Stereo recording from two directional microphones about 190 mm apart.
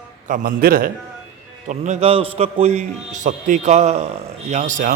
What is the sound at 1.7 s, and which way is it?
A man's voice, 35° right (ahead or behind).